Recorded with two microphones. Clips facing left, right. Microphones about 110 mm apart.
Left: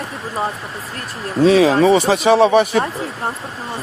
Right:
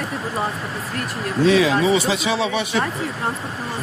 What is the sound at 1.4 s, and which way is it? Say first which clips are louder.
Speech: left 5 dB; 40° left (ahead or behind).